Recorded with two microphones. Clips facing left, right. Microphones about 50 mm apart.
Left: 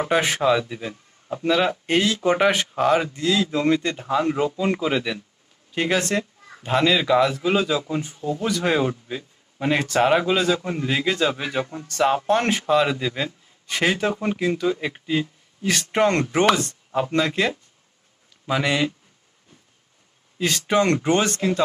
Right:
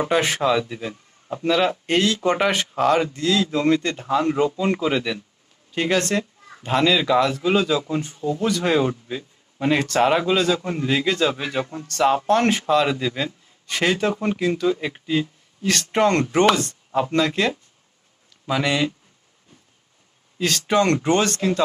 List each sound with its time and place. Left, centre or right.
0.0 s speech: centre
20.4 s speech: centre